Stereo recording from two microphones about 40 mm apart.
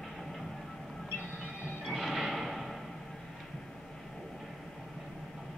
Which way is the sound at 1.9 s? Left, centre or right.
Centre.